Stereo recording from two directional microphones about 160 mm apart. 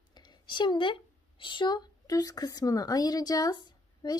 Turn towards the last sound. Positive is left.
turn(degrees=25)  # may be behind; listen again after turning